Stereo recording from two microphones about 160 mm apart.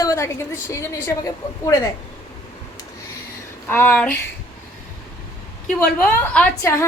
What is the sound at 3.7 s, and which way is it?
Speech, 10° left (ahead or behind).